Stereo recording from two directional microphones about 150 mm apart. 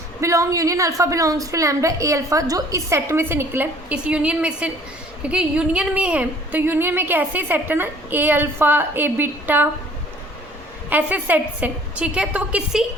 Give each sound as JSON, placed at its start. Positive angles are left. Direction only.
{"t": 0.2, "sound": "a woman's voice", "side_deg": -20}
{"t": 10.8, "sound": "a woman's voice", "side_deg": -10}